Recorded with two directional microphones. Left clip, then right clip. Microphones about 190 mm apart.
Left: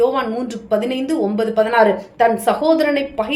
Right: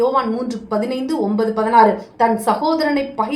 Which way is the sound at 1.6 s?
30° left (ahead or behind).